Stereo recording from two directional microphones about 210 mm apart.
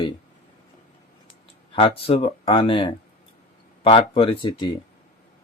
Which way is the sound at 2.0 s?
25° left (ahead or behind).